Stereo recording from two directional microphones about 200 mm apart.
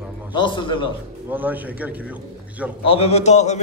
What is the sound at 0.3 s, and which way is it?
Speech, 25° left (ahead or behind).